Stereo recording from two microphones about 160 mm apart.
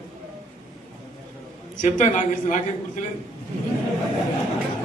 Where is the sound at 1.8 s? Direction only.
50° left (ahead or behind).